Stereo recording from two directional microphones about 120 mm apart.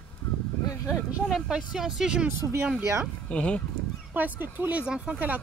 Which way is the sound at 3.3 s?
10° left (ahead or behind).